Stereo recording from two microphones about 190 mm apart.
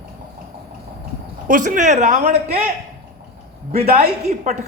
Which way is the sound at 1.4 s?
45° right (ahead or behind).